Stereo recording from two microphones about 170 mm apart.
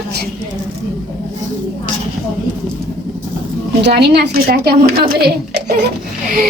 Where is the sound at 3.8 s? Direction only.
75° right (ahead or behind).